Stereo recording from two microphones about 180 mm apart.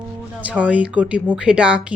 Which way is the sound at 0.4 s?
5° right (ahead or behind).